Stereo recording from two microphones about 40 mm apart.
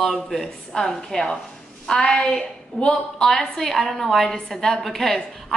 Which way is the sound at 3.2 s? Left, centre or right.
Centre.